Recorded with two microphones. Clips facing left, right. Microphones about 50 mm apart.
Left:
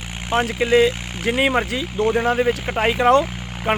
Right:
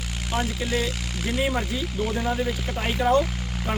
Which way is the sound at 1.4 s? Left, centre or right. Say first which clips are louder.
Left 6 dB; left.